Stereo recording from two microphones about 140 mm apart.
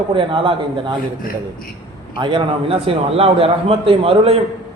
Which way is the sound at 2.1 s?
35° right (ahead or behind).